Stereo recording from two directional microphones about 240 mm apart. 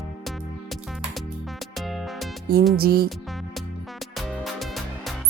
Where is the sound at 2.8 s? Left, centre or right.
Right.